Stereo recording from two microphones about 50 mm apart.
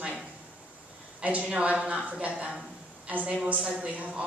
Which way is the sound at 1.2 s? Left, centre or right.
Right.